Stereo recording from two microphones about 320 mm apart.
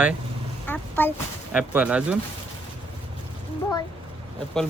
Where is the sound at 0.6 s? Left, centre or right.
Centre.